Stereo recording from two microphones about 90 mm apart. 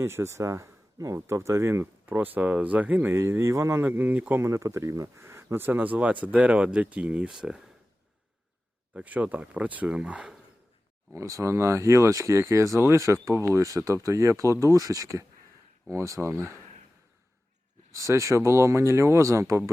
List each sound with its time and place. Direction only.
0.0 s speech: 30° right (ahead or behind)
3.8 s speech: 20° right (ahead or behind)
8.9 s speech: 15° right (ahead or behind)
11.1 s speech: 35° right (ahead or behind)
17.9 s speech: 35° right (ahead or behind)